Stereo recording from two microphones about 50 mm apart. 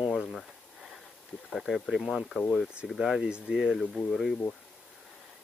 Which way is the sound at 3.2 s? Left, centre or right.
Centre.